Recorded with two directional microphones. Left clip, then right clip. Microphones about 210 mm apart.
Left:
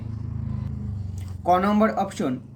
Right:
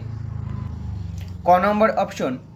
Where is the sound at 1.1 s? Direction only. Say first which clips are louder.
Right 4 dB; 15° left (ahead or behind).